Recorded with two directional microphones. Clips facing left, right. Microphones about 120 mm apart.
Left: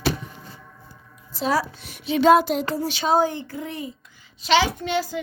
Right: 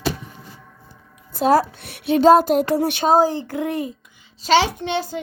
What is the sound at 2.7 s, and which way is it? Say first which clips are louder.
Speech: right 7 dB; 60° right (ahead or behind).